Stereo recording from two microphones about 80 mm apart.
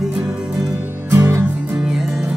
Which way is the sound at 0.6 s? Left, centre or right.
Right.